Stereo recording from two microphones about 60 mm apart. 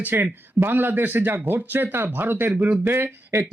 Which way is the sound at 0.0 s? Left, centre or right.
Right.